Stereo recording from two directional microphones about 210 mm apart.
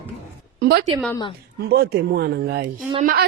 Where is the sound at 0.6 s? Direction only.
50° right (ahead or behind).